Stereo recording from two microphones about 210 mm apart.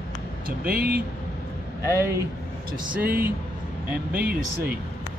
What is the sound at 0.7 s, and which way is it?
Speech, 45° right (ahead or behind).